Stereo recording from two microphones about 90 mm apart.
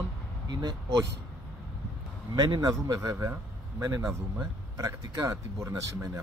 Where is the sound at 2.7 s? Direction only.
40° right (ahead or behind).